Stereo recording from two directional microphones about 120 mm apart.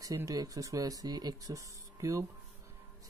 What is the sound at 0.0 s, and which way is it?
Speech, 30° right (ahead or behind).